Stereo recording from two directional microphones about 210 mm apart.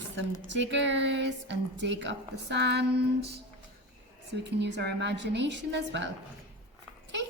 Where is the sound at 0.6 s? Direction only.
60° right (ahead or behind).